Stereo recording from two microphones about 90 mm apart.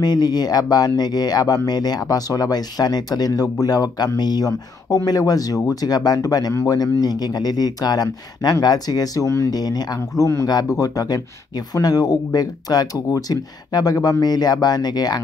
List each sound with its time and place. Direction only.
0.0 s speech: 50° left (ahead or behind)
6.5 s speech: 30° left (ahead or behind)
6.8 s speech: 50° left (ahead or behind)
9.6 s speech: 45° left (ahead or behind)
9.9 s speech: 35° left (ahead or behind)